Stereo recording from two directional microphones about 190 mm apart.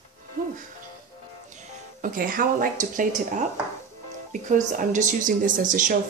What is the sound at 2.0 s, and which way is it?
Speech, 45° right (ahead or behind).